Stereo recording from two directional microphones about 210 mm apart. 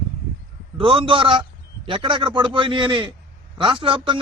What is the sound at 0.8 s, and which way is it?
Speech, 25° right (ahead or behind).